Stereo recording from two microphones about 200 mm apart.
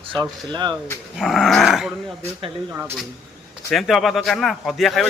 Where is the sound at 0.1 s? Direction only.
20° right (ahead or behind).